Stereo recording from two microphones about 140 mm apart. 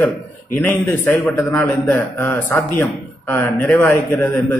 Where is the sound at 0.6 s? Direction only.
15° left (ahead or behind).